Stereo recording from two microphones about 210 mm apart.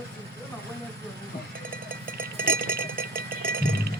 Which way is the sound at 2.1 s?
45° right (ahead or behind).